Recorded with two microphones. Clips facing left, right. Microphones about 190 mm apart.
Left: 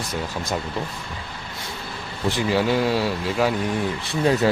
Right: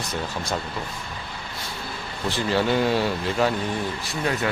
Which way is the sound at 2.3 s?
10° left (ahead or behind).